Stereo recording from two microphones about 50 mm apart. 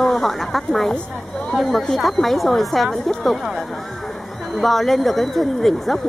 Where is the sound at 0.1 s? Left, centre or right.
Centre.